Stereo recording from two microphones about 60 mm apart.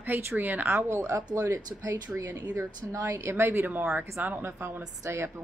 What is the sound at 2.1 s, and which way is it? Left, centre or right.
Speech, centre.